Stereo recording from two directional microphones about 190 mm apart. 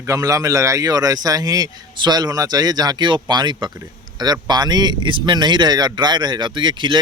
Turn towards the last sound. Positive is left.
turn(degrees=-25)  # may be behind; listen again after turning